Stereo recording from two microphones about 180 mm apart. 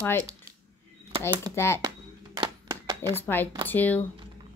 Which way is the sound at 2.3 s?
25° right (ahead or behind).